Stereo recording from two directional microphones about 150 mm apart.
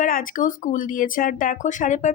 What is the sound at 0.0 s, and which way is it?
Speech, 65° left (ahead or behind).